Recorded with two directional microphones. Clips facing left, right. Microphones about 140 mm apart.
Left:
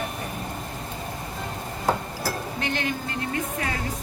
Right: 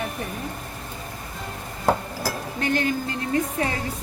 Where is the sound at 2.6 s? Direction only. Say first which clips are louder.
Right 6 dB; 40° right (ahead or behind).